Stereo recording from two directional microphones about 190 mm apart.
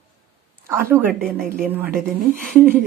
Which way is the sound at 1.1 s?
5° left (ahead or behind).